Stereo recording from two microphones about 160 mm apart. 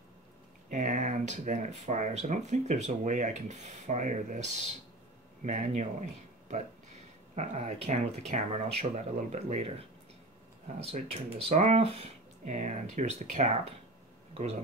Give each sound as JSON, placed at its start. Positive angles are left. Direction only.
{"t": 0.7, "sound": "speech", "side_deg": -50}
{"t": 7.3, "sound": "speech", "side_deg": -45}